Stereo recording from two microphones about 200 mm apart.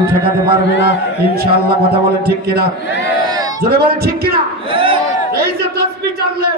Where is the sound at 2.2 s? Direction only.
50° right (ahead or behind).